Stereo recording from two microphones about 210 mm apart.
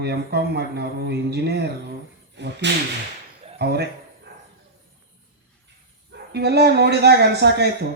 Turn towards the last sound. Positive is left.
turn(degrees=-50)  # may be behind; listen again after turning